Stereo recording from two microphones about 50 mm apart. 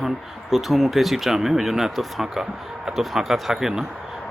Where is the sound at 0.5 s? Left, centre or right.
Centre.